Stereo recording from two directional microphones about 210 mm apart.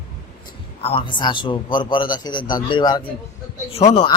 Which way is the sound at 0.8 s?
25° left (ahead or behind).